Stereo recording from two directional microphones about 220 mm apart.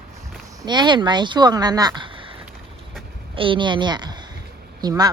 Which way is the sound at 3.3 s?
25° right (ahead or behind).